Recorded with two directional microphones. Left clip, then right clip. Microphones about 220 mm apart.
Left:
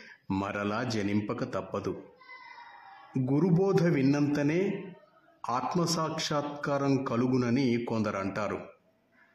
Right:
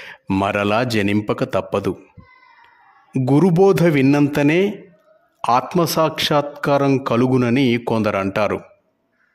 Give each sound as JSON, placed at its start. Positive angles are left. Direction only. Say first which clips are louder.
{"t": 0.0, "sound": "a man's voice", "louder": "right 14 dB", "side_deg": -45}
{"t": 3.1, "sound": "a man's voice", "louder": "right 12 dB", "side_deg": -45}